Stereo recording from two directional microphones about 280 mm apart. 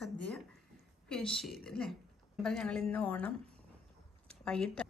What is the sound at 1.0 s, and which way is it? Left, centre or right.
A woman's voice, centre.